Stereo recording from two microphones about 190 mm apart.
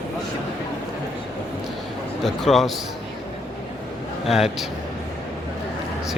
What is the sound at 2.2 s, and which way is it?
Speech, centre (ahead or behind).